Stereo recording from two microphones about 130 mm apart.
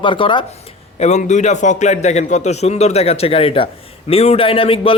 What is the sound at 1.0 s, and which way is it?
A man's voice, 65° left (ahead or behind).